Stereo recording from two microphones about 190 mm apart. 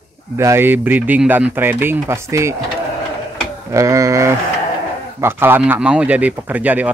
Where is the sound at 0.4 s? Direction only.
15° right (ahead or behind).